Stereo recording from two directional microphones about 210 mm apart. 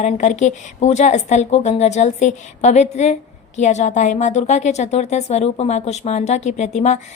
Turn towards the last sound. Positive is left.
turn(degrees=35)  # may be behind; listen again after turning